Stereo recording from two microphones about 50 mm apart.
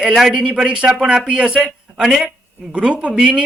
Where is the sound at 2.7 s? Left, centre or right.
Right.